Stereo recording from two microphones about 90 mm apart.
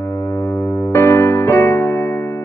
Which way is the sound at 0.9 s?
30° left (ahead or behind).